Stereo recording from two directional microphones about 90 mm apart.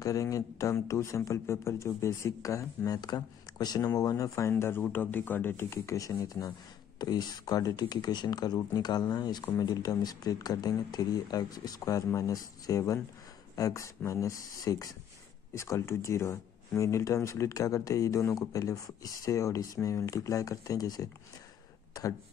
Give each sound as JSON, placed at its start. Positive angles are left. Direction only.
{"t": 0.0, "sound": "speech", "side_deg": 40}